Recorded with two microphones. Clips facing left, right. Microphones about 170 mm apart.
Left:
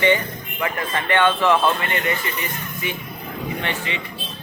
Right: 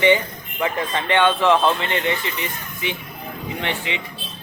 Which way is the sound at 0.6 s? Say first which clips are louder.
Right 2 dB; 20° right (ahead or behind).